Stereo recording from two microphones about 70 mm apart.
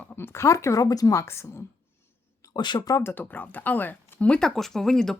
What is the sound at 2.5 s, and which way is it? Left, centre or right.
Speech, left.